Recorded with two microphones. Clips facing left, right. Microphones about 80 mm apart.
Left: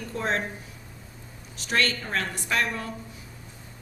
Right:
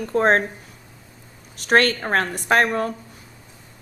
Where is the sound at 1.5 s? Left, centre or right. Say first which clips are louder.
Right 9 dB; right.